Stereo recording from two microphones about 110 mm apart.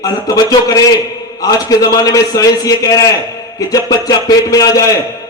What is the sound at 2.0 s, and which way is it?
A man's voice, 30° left (ahead or behind).